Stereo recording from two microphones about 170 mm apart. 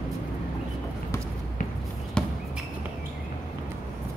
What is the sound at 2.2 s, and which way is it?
Basketball bounce, 5° left (ahead or behind).